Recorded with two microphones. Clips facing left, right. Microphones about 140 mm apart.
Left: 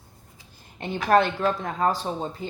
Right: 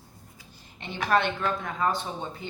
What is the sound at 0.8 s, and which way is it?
Speech, 40° left (ahead or behind).